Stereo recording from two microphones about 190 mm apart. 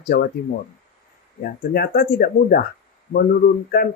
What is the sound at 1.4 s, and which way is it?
Speech, 50° left (ahead or behind).